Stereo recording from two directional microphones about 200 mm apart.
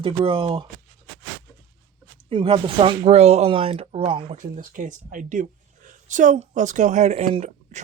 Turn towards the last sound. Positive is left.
turn(degrees=-35)  # may be behind; listen again after turning